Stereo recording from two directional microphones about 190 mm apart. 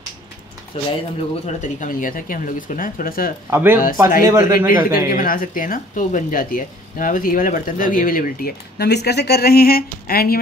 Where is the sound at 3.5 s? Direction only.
10° right (ahead or behind).